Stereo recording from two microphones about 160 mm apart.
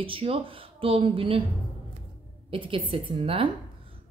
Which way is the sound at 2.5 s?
35° right (ahead or behind).